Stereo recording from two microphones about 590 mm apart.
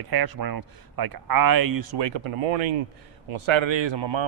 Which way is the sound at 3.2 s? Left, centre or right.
Right.